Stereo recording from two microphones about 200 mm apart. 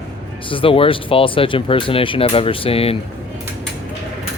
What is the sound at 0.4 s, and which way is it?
Speech, 25° left (ahead or behind).